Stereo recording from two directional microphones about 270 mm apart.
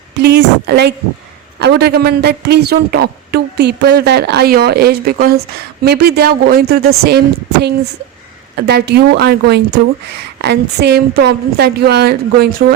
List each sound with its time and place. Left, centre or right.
0.2 s a woman's voice: right
8.5 s a woman's voice: right